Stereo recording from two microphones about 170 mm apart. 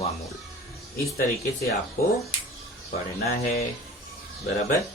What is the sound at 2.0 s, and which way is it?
Speech, 60° left (ahead or behind).